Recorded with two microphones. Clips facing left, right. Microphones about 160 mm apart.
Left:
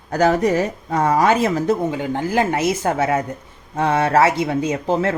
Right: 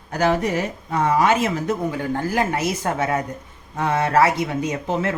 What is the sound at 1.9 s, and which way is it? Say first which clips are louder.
Speech: left 2 dB; 20° left (ahead or behind).